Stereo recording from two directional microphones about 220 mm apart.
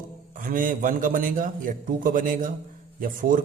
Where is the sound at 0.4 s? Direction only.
40° right (ahead or behind).